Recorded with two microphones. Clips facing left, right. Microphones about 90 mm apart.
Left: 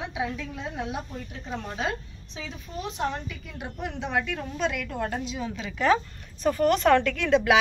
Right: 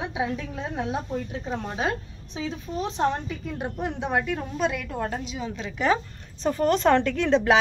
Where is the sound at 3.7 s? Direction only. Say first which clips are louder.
Right 1 dB; 20° right (ahead or behind).